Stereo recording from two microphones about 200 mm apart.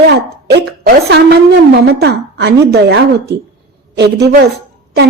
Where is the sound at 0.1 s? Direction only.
55° right (ahead or behind).